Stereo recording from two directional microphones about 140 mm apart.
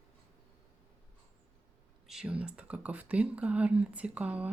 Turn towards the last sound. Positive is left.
turn(degrees=-10)  # may be behind; listen again after turning